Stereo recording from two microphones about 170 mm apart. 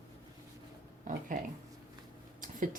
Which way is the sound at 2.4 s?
55° right (ahead or behind).